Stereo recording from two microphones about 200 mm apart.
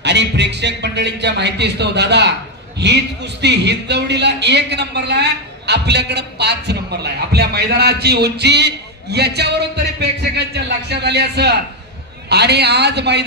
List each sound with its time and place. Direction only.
0.0 s a man's voice: 60° right (ahead or behind)